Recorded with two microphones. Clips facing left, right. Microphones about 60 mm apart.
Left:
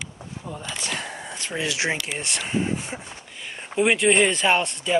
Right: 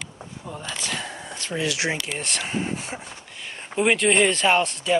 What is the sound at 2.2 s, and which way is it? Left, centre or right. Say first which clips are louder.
Speech: left 1 dB; centre.